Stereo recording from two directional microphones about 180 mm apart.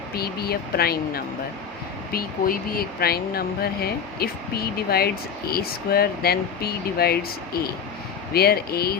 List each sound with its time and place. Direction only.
0.1 s speech: 60° left (ahead or behind)